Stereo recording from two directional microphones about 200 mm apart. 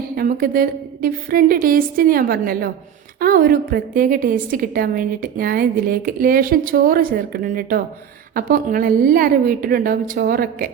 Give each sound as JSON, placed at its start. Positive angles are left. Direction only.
{"t": 0.2, "sound": "a woman's voice", "side_deg": -45}